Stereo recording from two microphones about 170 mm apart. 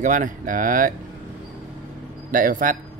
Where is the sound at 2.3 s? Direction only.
55° right (ahead or behind).